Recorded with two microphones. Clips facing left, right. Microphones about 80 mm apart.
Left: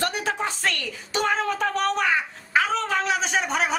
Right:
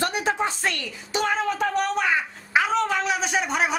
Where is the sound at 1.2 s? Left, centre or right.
Centre.